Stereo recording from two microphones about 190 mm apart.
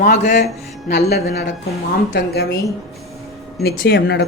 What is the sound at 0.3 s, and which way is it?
A woman's voice, 60° left (ahead or behind).